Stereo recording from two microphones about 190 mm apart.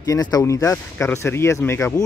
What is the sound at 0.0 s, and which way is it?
Speech, 20° left (ahead or behind).